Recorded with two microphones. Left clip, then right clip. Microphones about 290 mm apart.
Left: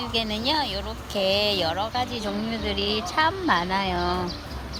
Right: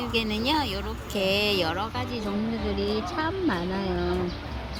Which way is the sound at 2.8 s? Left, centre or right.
Left.